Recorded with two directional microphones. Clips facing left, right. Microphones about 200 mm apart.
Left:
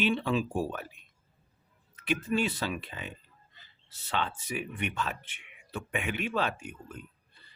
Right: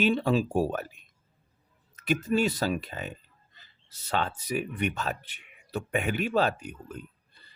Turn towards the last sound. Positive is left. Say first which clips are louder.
# right 3 dB
turn(degrees=-40)  # may be behind; listen again after turning